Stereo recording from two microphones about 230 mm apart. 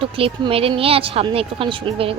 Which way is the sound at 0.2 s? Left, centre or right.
Right.